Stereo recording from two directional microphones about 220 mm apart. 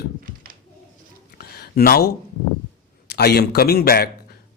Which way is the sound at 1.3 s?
45° left (ahead or behind).